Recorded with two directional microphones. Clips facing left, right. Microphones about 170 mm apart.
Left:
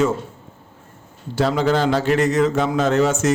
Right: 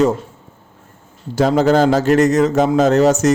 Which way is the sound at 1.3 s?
40° right (ahead or behind).